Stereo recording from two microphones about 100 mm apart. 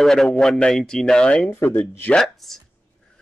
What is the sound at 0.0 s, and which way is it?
Speech, 5° left (ahead or behind).